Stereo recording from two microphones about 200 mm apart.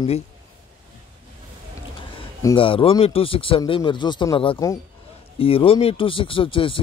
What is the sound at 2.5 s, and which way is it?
A man's voice, 25° left (ahead or behind).